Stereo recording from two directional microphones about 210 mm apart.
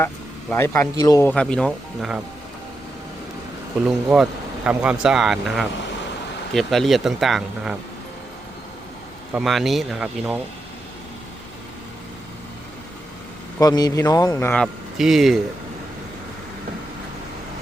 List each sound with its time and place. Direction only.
0.5 s speech: 10° left (ahead or behind)
3.8 s speech: 5° right (ahead or behind)
9.3 s speech: centre (ahead or behind)
13.6 s speech: 20° left (ahead or behind); by 15.4 s centre (ahead or behind)